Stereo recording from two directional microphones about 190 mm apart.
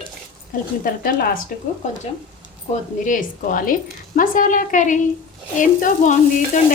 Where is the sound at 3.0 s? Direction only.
45° left (ahead or behind).